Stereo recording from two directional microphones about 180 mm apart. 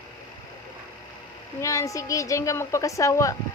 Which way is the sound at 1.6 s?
15° left (ahead or behind).